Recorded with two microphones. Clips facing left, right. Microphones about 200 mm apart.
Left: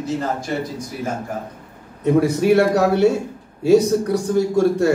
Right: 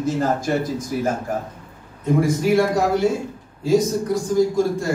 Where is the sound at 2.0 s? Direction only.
65° left (ahead or behind).